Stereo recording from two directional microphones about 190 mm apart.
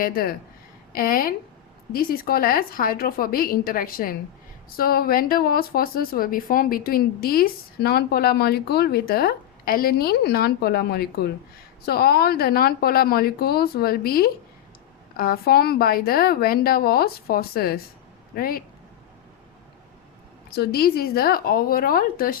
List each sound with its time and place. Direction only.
0.0 s speech: 50° left (ahead or behind)
20.5 s speech: 55° left (ahead or behind)